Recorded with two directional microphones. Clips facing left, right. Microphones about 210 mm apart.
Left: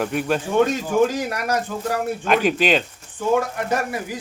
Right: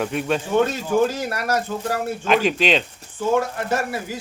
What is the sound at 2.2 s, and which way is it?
Speech, centre (ahead or behind).